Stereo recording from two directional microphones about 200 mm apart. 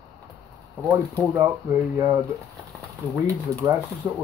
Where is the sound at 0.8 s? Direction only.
15° right (ahead or behind).